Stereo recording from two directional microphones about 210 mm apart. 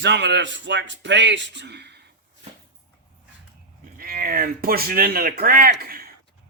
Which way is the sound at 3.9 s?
45° right (ahead or behind).